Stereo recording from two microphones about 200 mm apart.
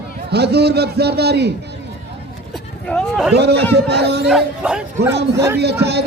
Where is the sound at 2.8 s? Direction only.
Centre (ahead or behind).